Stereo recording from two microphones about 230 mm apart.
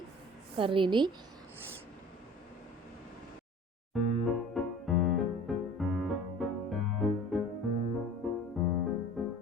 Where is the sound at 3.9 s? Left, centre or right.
Centre.